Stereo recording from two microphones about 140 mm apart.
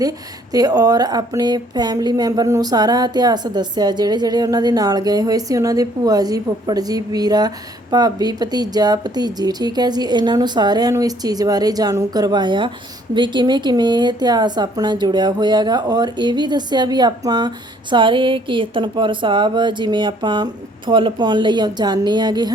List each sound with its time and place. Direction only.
0.5 s speech: 25° right (ahead or behind)